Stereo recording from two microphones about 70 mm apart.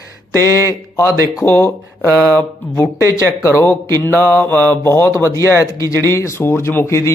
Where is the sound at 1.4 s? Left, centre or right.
Left.